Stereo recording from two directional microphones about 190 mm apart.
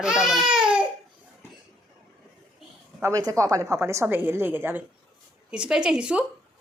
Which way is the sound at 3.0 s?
15° right (ahead or behind).